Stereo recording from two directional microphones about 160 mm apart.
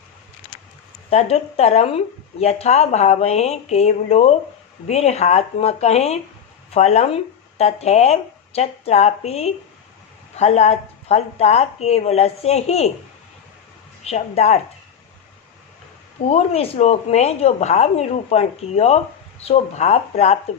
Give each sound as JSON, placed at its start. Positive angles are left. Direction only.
{"t": 1.1, "sound": "a woman's voice", "side_deg": 40}
{"t": 14.0, "sound": "a woman's voice", "side_deg": 40}
{"t": 16.3, "sound": "a woman's voice", "side_deg": 40}